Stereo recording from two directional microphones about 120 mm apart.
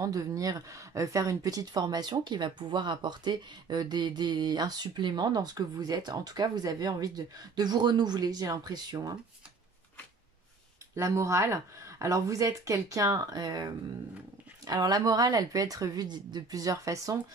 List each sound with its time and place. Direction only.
0.0 s speech: 30° right (ahead or behind)
11.0 s speech: 25° right (ahead or behind)